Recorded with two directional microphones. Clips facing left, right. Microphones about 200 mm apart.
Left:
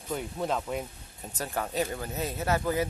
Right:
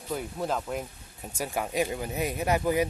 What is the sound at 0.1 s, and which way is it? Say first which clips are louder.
Speech: even; centre (ahead or behind).